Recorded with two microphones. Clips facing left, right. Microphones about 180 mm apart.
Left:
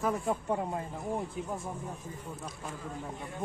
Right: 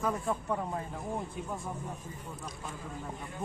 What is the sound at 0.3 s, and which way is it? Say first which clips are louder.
Speech: left 2 dB; 25° left (ahead or behind).